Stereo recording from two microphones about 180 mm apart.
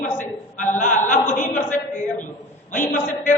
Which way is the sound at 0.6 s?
45° left (ahead or behind).